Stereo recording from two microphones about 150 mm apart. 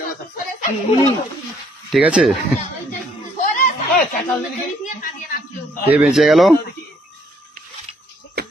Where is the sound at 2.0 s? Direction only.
10° right (ahead or behind).